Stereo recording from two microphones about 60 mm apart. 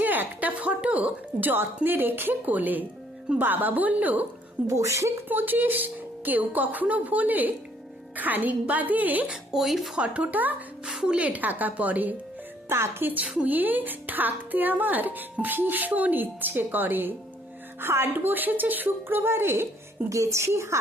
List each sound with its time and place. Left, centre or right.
0.0 s a woman's voice: right
4.7 s a woman's voice: right
5.3 s a woman's voice: right
9.2 s speech: centre
10.0 s a woman's voice: right
10.8 s speech: centre
11.3 s a woman's voice: right
12.6 s speech: right
13.2 s a woman's voice: centre
13.5 s a woman's voice: right
20.1 s speech: right